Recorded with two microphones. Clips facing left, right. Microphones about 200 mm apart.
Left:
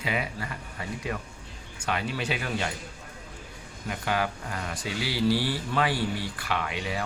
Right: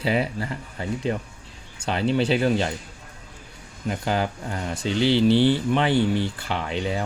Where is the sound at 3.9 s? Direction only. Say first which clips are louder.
Right 4 dB; 30° right (ahead or behind).